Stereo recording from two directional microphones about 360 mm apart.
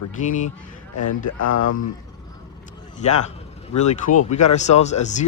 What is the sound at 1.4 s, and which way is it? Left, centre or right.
Speech, left.